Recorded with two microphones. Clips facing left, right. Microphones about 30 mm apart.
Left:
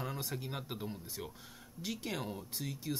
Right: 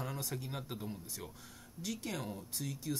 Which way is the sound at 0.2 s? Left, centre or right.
Left.